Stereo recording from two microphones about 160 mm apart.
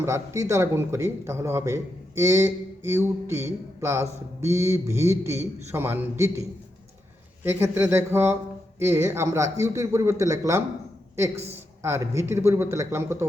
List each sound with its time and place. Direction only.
0.0 s speech: 20° right (ahead or behind)
7.4 s speech: 15° right (ahead or behind)
11.8 s speech: 15° right (ahead or behind)